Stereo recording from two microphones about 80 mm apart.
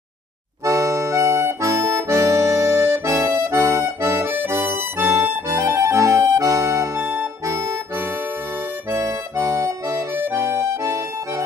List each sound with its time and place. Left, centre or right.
0.7 s accordion: right
8.9 s accordion: right